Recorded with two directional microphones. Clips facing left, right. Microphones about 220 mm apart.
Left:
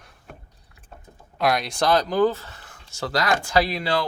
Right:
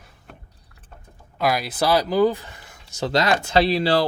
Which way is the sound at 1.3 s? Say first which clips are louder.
Even; 5° right (ahead or behind).